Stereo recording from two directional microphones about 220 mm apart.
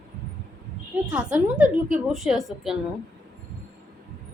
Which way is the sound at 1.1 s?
5° right (ahead or behind).